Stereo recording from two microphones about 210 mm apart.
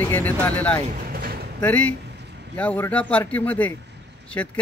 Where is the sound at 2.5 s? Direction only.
10° left (ahead or behind).